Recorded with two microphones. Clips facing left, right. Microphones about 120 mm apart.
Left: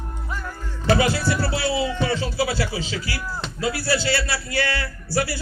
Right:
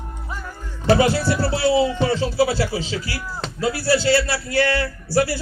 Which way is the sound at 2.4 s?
35° right (ahead or behind).